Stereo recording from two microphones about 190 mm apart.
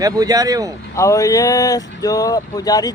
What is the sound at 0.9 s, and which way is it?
Speech, 15° left (ahead or behind).